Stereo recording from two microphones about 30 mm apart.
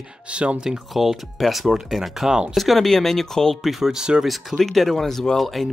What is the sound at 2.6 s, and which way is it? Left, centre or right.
Speech, centre.